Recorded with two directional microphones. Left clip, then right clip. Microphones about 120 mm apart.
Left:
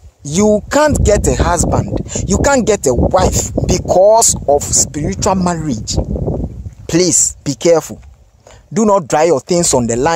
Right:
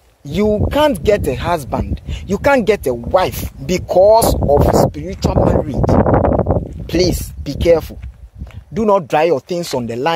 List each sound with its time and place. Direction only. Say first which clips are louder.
0.2 s speech: left 3 dB; 50° left (ahead or behind); by 5.4 s 85° left
5.4 s speech: right 3 dB; 35° left (ahead or behind)
6.9 s a woman's voice: left 4 dB; 60° left (ahead or behind)
8.7 s speech: left 2 dB; 75° left (ahead or behind)
9.8 s speech: left 4 dB; 55° left (ahead or behind)